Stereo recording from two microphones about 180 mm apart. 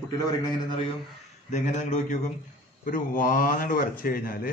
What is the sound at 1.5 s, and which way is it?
Speech, 40° left (ahead or behind).